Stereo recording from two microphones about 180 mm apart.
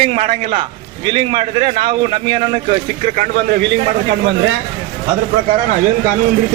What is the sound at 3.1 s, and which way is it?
Speech, 55° right (ahead or behind).